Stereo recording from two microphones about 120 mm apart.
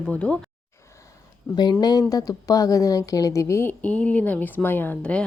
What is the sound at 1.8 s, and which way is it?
A woman's voice, 30° left (ahead or behind).